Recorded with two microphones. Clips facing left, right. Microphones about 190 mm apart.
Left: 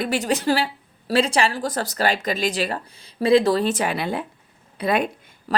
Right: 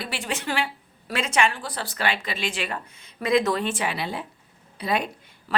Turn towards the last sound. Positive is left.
turn(degrees=40)  # may be behind; listen again after turning